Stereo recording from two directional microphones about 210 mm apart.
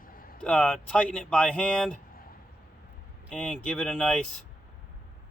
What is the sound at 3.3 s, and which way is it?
Speech, 5° left (ahead or behind).